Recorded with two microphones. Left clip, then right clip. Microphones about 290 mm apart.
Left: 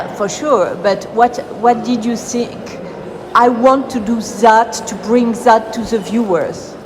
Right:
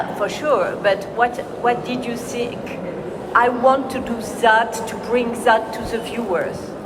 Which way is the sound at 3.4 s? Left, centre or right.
Centre.